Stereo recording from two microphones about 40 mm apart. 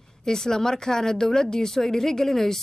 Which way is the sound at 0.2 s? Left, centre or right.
Centre.